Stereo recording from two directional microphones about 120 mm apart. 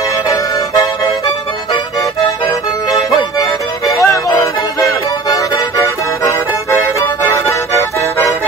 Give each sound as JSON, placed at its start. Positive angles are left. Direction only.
{"t": 0.3, "sound": "music", "side_deg": 30}
{"t": 2.9, "sound": "music", "side_deg": 30}